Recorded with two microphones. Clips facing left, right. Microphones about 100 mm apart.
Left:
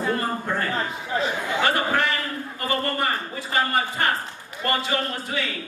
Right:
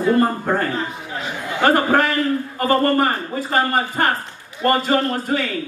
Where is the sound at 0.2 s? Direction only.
45° right (ahead or behind).